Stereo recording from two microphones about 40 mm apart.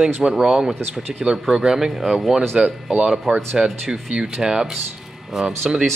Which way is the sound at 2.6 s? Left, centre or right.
Right.